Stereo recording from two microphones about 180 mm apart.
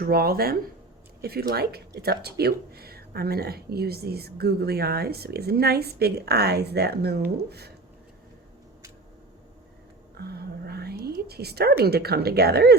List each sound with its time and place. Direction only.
0.0 s speech: 55° right (ahead or behind)
10.2 s a sound: 60° right (ahead or behind)
11.8 s speech: 60° right (ahead or behind)